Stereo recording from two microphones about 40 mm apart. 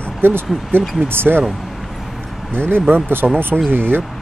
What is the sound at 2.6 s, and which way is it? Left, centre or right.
Speech, right.